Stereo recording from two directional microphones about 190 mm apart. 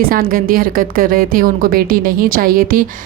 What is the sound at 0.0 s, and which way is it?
A woman's voice, 50° right (ahead or behind).